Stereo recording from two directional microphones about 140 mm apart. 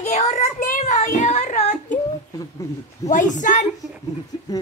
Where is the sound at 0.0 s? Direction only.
50° left (ahead or behind).